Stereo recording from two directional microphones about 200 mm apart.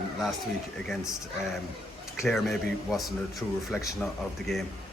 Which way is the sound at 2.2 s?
Centre (ahead or behind).